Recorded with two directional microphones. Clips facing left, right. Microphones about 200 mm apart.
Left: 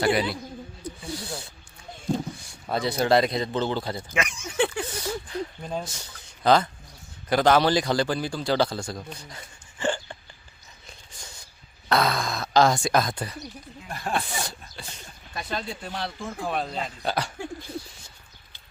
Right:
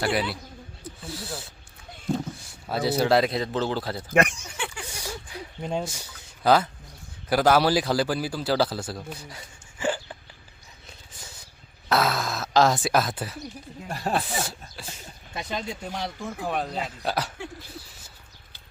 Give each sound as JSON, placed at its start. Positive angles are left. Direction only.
{"t": 0.0, "sound": "a man's voice", "side_deg": 0}
{"t": 4.1, "sound": "speech", "side_deg": -55}
{"t": 4.5, "sound": "a sound", "side_deg": 60}
{"t": 4.9, "sound": "a sound", "side_deg": -10}
{"t": 5.8, "sound": "a man's voice", "side_deg": -10}
{"t": 11.9, "sound": "a man's voice", "side_deg": -5}
{"t": 13.8, "sound": "speech", "side_deg": -35}
{"t": 14.3, "sound": "a man's voice", "side_deg": -5}
{"t": 15.3, "sound": "a man's voice", "side_deg": -20}